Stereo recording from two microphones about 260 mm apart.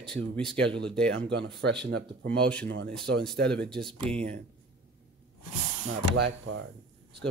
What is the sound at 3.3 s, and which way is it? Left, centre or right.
Speech, right.